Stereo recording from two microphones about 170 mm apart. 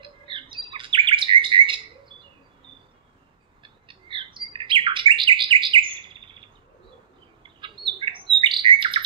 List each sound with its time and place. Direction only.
0.0 s chirp: 30° right (ahead or behind)
3.6 s bird: 30° right (ahead or behind)
7.4 s bird: 30° right (ahead or behind)